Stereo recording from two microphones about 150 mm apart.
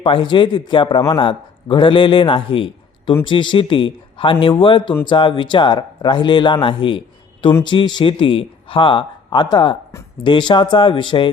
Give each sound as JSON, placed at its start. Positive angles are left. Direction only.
{"t": 0.0, "sound": "a man's voice", "side_deg": 35}